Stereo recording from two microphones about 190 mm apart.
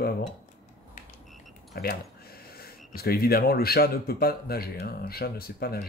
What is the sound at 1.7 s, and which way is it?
Speech, 55° left (ahead or behind).